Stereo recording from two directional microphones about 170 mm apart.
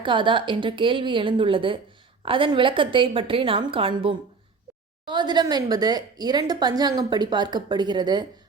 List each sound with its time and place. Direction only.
0.0 s a woman's voice: 30° right (ahead or behind)